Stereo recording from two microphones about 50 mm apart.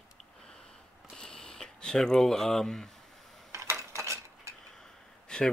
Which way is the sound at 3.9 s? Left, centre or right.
Right.